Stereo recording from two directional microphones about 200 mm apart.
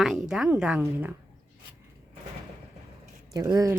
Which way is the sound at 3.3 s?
20° right (ahead or behind).